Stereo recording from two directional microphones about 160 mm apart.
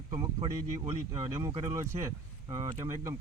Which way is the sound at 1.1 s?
20° right (ahead or behind).